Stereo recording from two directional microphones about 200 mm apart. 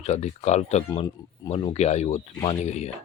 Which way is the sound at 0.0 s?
35° left (ahead or behind).